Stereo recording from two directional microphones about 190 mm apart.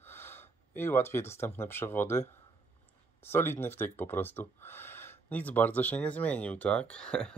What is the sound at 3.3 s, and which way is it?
Speech, 10° left (ahead or behind).